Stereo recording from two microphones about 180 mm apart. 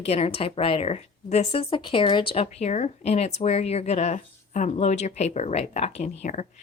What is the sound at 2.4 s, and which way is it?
Speech, 40° left (ahead or behind).